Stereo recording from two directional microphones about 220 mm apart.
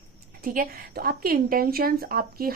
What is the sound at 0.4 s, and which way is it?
A woman's voice, 40° right (ahead or behind).